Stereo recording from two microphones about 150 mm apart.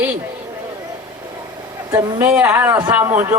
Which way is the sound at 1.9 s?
20° right (ahead or behind).